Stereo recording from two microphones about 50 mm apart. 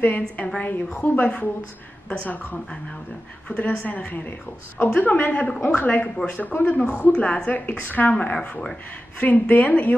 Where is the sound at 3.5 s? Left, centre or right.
Left.